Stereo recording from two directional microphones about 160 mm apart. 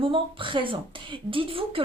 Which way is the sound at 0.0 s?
35° right (ahead or behind).